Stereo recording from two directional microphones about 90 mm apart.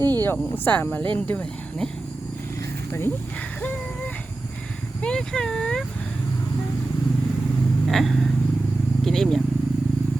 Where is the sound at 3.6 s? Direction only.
15° left (ahead or behind).